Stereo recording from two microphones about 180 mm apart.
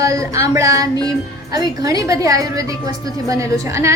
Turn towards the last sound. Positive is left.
turn(degrees=-15)  # may be behind; listen again after turning